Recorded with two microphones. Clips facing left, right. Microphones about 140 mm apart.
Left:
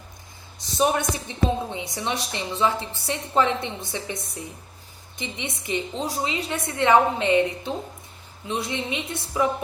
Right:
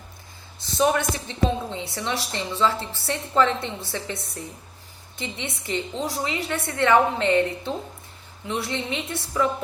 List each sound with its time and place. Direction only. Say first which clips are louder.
0.8 s a woman's voice: right 1 dB; 20° left (ahead or behind)